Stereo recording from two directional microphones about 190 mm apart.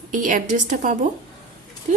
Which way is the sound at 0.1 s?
45° right (ahead or behind).